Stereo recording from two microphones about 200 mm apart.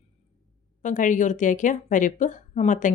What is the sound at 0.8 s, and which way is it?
Speech, 40° left (ahead or behind).